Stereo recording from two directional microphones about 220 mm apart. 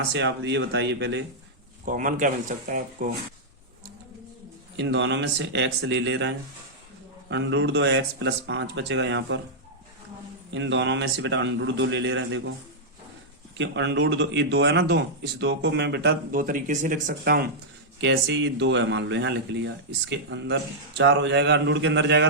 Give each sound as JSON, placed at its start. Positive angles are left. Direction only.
{"t": 0.1, "sound": "speech", "side_deg": -50}
{"t": 1.8, "sound": "speech", "side_deg": -40}
{"t": 4.8, "sound": "speech", "side_deg": -55}
{"t": 10.5, "sound": "a man's voice", "side_deg": -55}
{"t": 13.6, "sound": "speech", "side_deg": -55}